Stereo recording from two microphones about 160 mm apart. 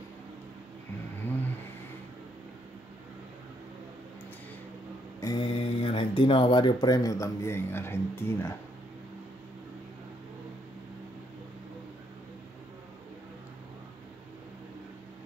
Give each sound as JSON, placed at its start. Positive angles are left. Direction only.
{"t": 5.2, "sound": "speech", "side_deg": 30}